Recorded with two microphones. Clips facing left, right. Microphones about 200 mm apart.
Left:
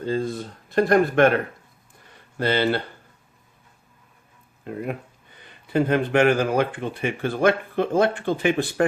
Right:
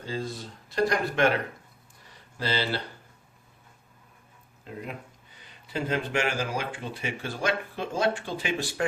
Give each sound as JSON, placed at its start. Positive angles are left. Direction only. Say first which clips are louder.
{"t": 0.0, "sound": "speech", "louder": "left 8 dB", "side_deg": 55}
{"t": 2.4, "sound": "speech", "louder": "left 8 dB", "side_deg": 55}
{"t": 4.6, "sound": "speech", "louder": "left 8 dB", "side_deg": 55}